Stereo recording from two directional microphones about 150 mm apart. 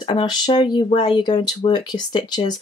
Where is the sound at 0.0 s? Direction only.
30° left (ahead or behind).